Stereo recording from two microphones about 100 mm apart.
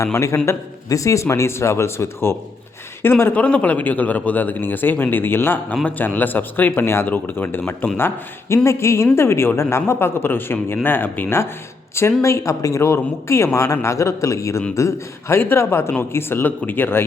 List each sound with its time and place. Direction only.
0.0 s a man's voice: 30° left (ahead or behind)
12.2 s a man's voice: 30° left (ahead or behind)